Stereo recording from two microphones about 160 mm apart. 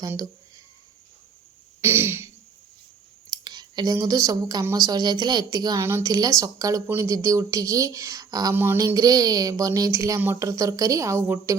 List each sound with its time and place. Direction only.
1.8 s throat clearing: 15° right (ahead or behind)
3.2 s speech: 25° right (ahead or behind)
8.5 s speech: 15° right (ahead or behind)